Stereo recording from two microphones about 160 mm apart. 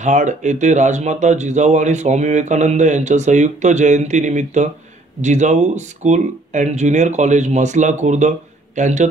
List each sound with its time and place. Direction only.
0.0 s speech: 50° right (ahead or behind)